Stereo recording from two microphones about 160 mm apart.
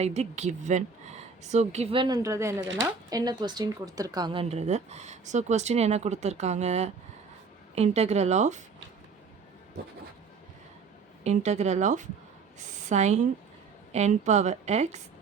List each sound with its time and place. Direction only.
0.0 s a woman's voice: 45° right (ahead or behind)
11.2 s a woman's voice: 45° right (ahead or behind)